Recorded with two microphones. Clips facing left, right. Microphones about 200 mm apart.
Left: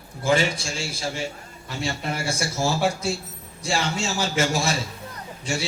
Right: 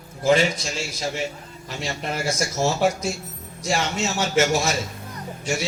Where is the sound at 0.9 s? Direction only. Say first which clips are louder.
Right 2 dB; 30° left (ahead or behind).